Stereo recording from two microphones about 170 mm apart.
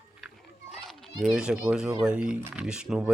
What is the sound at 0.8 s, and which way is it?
Speech, centre (ahead or behind).